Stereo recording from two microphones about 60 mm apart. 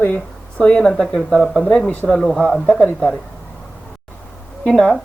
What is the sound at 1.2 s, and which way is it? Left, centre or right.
Speech, centre.